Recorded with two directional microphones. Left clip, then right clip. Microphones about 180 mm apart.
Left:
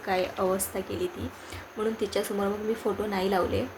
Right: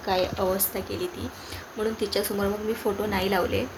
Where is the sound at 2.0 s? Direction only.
10° left (ahead or behind).